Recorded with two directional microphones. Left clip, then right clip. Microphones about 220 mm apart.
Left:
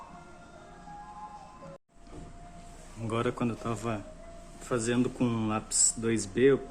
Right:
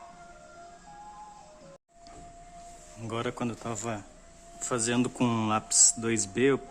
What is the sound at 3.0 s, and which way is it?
Speech, 15° right (ahead or behind).